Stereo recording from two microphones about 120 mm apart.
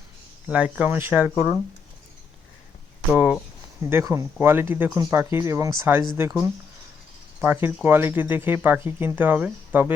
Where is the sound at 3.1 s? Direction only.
10° right (ahead or behind).